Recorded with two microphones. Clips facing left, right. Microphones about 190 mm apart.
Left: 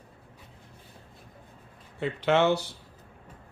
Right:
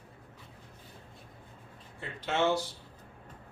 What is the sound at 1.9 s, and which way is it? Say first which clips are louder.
Speech: left 8 dB; 70° left (ahead or behind).